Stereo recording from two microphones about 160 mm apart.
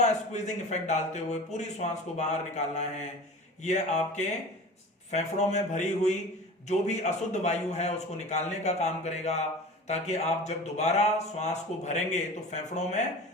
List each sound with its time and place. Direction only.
0.0 s speech: 45° left (ahead or behind)